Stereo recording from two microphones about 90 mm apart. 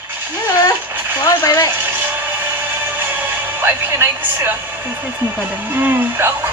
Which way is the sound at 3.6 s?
25° right (ahead or behind).